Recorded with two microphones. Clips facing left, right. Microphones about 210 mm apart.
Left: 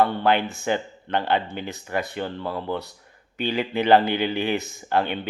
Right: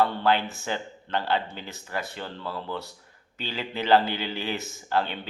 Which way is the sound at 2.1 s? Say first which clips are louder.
Left 6 dB; 55° left (ahead or behind).